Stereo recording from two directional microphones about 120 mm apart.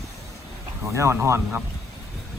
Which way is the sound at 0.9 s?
25° right (ahead or behind).